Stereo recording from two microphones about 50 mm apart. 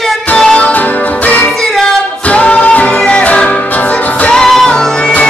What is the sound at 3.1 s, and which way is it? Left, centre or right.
Music, left.